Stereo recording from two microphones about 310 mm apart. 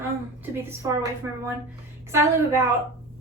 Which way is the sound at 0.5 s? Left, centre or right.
Centre.